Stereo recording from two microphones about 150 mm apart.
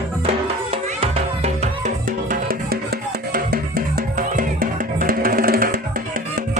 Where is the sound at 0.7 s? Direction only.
40° right (ahead or behind).